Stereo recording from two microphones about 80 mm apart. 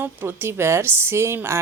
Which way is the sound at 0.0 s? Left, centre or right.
Right.